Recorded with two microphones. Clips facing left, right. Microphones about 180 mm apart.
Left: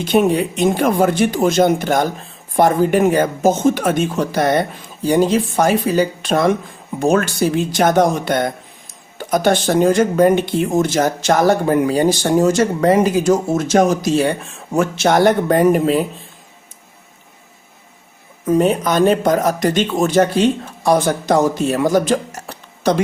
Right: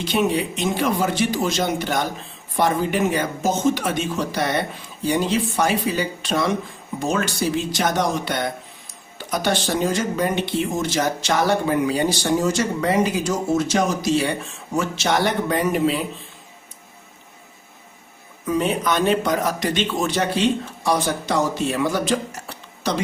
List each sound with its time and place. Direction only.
0.0 s speech: 50° left (ahead or behind)
18.4 s speech: 45° left (ahead or behind)